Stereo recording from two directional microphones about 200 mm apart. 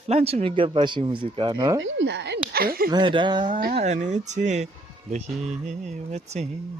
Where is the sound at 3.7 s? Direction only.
35° right (ahead or behind).